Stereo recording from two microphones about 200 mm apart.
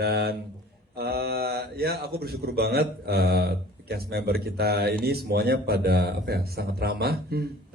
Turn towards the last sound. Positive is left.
turn(degrees=-50)  # may be behind; listen again after turning